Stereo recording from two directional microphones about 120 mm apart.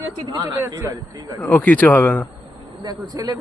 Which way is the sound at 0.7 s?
30° right (ahead or behind).